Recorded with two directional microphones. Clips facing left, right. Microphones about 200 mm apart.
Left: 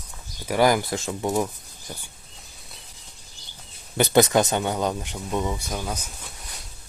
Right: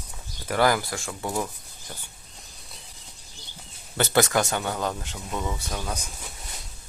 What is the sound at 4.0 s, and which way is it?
Speech, 20° left (ahead or behind).